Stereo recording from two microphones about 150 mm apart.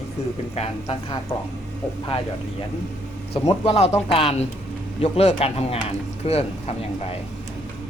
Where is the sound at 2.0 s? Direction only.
40° left (ahead or behind).